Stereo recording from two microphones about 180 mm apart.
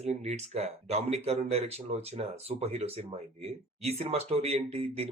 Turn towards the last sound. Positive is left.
turn(degrees=-35)  # may be behind; listen again after turning